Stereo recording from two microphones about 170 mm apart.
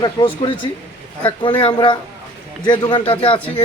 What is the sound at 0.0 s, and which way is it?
Speech, 30° left (ahead or behind).